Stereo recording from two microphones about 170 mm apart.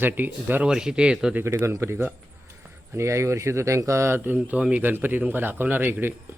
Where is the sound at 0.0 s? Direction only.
10° right (ahead or behind).